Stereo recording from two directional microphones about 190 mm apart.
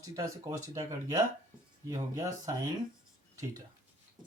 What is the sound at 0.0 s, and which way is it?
Speech, 20° right (ahead or behind).